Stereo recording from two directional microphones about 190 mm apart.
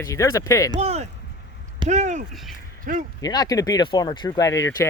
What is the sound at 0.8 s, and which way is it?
Speech, 35° right (ahead or behind).